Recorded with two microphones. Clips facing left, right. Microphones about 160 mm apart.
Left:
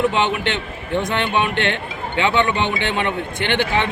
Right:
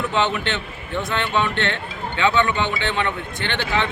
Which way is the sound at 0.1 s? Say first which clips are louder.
Left 2 dB; 15° left (ahead or behind).